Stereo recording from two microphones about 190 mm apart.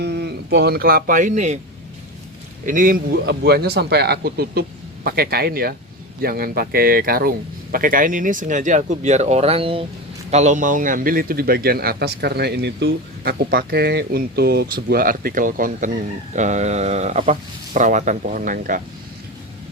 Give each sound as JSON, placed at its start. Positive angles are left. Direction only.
{"t": 0.0, "sound": "speech", "side_deg": -60}
{"t": 2.6, "sound": "speech", "side_deg": -45}
{"t": 10.3, "sound": "speech", "side_deg": -40}